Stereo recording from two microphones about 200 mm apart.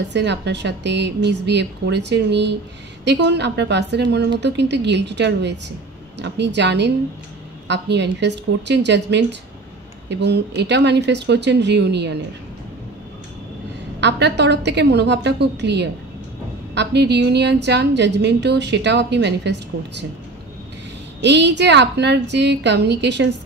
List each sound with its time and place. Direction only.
0.1 s a woman's voice: 60° right (ahead or behind)
14.0 s a woman's voice: 60° right (ahead or behind)
21.2 s a woman's voice: 60° right (ahead or behind)